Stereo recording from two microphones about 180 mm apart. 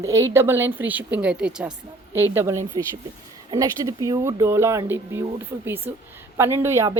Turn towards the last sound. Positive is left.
turn(degrees=-15)  # may be behind; listen again after turning